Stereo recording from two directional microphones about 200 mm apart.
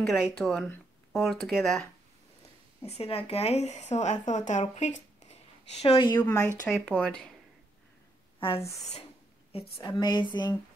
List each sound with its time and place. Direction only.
0.0 s speech: centre (ahead or behind)
2.8 s speech: 30° left (ahead or behind)
5.8 s speech: 25° left (ahead or behind)
6.7 s speech: 5° left (ahead or behind)
8.4 s speech: 30° left (ahead or behind)